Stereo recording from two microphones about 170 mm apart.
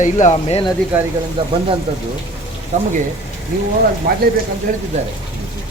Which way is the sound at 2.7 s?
45° right (ahead or behind).